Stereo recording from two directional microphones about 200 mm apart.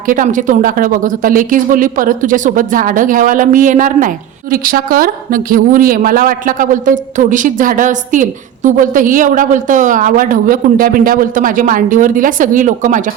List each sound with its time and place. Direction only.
0.1 s a woman's voice: 40° right (ahead or behind)